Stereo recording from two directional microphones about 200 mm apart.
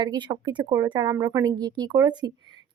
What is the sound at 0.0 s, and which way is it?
Speech, 20° right (ahead or behind).